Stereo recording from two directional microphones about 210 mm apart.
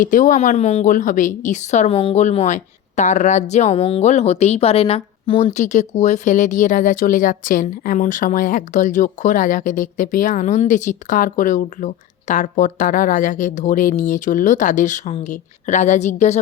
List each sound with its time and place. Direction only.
0.0 s a woman's voice: 40° left (ahead or behind)